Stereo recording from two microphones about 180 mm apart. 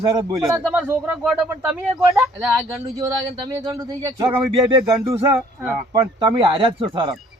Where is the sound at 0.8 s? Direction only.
15° right (ahead or behind).